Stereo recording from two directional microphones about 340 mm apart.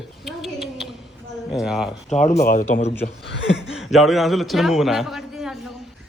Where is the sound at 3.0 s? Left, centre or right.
Left.